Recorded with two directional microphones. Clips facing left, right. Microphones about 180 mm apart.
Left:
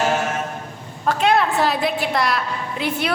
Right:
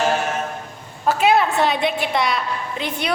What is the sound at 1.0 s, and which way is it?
A woman's voice, 5° right (ahead or behind).